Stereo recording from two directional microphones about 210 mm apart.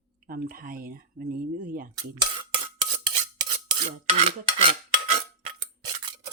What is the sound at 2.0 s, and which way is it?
Stir, 20° right (ahead or behind).